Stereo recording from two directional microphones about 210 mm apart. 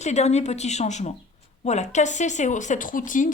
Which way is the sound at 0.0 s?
30° left (ahead or behind).